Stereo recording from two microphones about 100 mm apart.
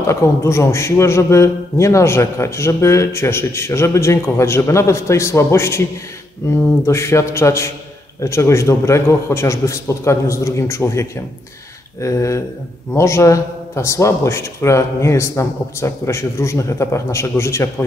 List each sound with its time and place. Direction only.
0.0 s a man's voice: 30° left (ahead or behind)